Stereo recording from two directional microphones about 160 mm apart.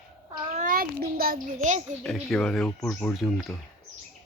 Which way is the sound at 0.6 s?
60° right (ahead or behind).